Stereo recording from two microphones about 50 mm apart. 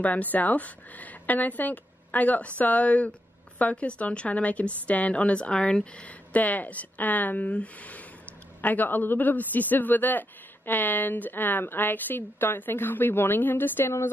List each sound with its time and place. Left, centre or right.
0.0 s a woman's voice: left
13.8 s a woman's voice: left